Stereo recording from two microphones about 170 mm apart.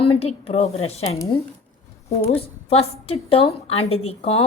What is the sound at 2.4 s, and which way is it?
A woman's voice, 35° left (ahead or behind).